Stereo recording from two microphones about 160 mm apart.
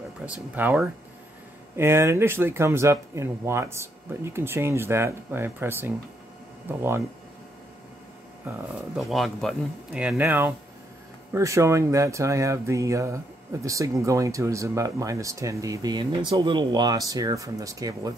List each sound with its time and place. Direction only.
0.2 s speech: 10° right (ahead or behind)
8.9 s speech: centre (ahead or behind); by 18.1 s 20° right (ahead or behind)